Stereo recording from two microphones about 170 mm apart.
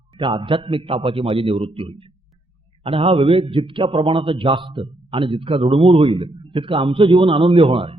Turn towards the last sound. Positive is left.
turn(degrees=-30)  # may be behind; listen again after turning